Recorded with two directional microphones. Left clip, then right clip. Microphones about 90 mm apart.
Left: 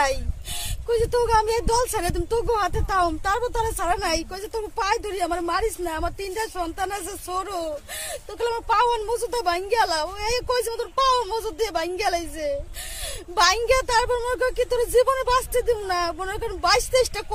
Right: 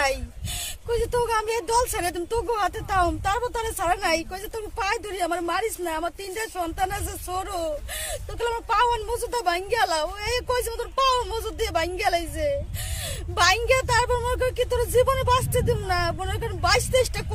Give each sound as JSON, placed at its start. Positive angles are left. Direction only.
{"t": 0.8, "sound": "speech", "side_deg": 35}